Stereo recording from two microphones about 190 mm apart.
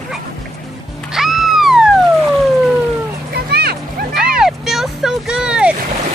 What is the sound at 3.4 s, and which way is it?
Vehicle, 55° right (ahead or behind).